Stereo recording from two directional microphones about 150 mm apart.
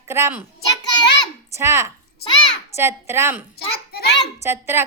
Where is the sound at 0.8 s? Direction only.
25° left (ahead or behind).